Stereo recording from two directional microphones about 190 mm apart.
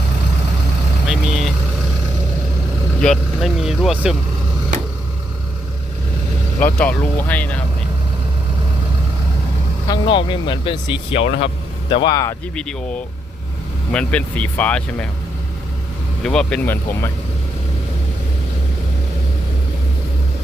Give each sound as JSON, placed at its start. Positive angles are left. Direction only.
{"t": 1.0, "sound": "vehicle", "side_deg": -5}
{"t": 3.0, "sound": "speech", "side_deg": 0}
{"t": 6.7, "sound": "speech", "side_deg": 10}
{"t": 9.9, "sound": "speech", "side_deg": 25}
{"t": 12.5, "sound": "speech", "side_deg": 5}
{"t": 16.2, "sound": "speech", "side_deg": 5}